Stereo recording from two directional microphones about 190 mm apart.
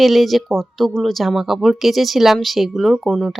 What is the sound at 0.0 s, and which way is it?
Speech, centre (ahead or behind).